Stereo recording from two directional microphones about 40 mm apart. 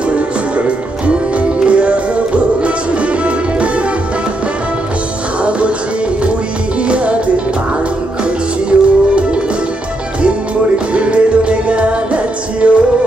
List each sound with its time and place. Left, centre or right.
0.1 s music: right
8.6 s music: right
10.9 s music: right